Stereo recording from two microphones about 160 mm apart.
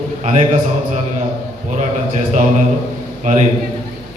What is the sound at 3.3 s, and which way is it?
Speech, 50° right (ahead or behind).